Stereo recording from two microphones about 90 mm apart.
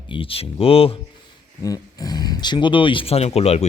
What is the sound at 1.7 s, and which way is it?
Speech, 45° left (ahead or behind).